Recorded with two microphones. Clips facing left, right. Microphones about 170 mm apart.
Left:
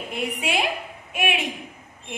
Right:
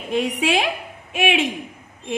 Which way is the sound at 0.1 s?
90° right.